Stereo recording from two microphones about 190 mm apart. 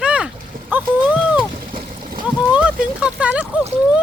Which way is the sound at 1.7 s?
50° right (ahead or behind).